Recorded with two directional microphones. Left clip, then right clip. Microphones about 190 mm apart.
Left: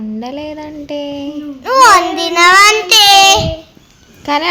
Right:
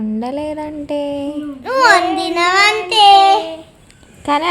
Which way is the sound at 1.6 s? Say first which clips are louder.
Left 4 dB; 15° left (ahead or behind).